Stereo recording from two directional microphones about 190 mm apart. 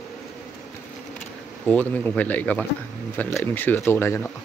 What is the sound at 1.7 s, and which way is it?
Speech, 10° left (ahead or behind).